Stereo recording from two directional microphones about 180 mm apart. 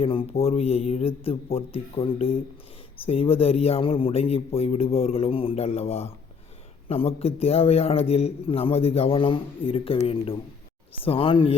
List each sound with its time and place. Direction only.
0.0 s a man's voice: 30° left (ahead or behind)
11.0 s a man's voice: 30° left (ahead or behind)